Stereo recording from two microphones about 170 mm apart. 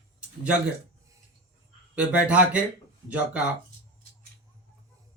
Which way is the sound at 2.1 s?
10° right (ahead or behind).